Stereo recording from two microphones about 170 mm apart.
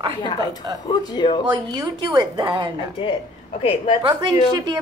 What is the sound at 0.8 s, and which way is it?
Speech, 25° left (ahead or behind).